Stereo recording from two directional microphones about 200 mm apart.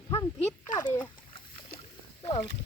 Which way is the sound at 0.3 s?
30° left (ahead or behind).